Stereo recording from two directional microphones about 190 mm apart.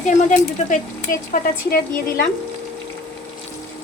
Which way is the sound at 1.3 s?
50° left (ahead or behind).